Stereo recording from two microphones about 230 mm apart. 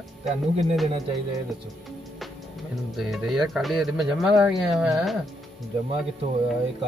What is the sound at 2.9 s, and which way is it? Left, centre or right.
Speech, centre.